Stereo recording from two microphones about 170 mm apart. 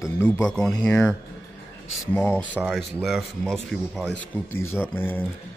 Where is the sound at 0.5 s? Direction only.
5° left (ahead or behind).